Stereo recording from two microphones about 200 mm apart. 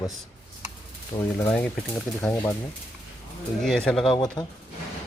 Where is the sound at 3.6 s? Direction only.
5° left (ahead or behind).